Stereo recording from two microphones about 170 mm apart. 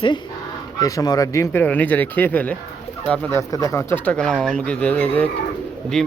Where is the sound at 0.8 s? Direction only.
20° left (ahead or behind); by 3.4 s 5° left (ahead or behind).